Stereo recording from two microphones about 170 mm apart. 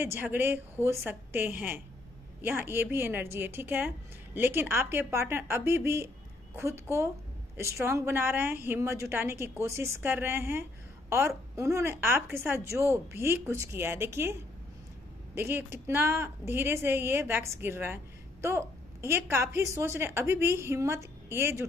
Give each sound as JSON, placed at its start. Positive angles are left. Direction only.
{"t": 0.0, "sound": "speech", "side_deg": -10}
{"t": 15.3, "sound": "speech", "side_deg": -15}